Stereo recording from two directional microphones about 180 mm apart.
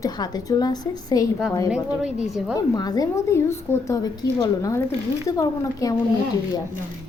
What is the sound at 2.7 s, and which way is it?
A woman's voice, 20° left (ahead or behind).